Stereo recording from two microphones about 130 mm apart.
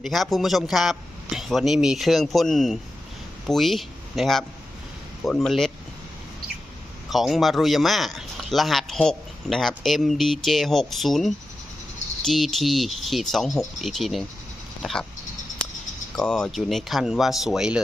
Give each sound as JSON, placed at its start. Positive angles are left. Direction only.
{"t": 0.0, "sound": "a man's voice", "side_deg": 0}
{"t": 7.1, "sound": "speech", "side_deg": 0}
{"t": 14.8, "sound": "a sound", "side_deg": 5}
{"t": 16.1, "sound": "speech", "side_deg": 5}